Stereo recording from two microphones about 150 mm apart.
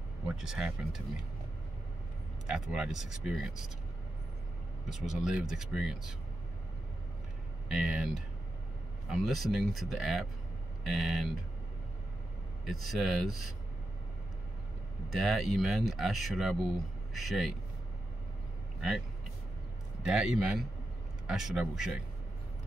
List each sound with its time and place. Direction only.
0.3 s speech: 5° right (ahead or behind)
2.4 s speech: 5° right (ahead or behind)
4.8 s speech: 5° right (ahead or behind)
7.6 s speech: 5° right (ahead or behind)
12.8 s speech: centre (ahead or behind)
15.1 s speech: centre (ahead or behind)
18.8 s speech: centre (ahead or behind)